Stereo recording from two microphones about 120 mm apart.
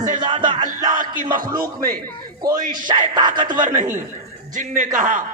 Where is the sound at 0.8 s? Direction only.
90° right.